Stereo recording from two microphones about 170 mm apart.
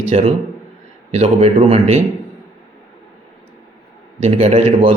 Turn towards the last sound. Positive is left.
turn(degrees=-40)  # may be behind; listen again after turning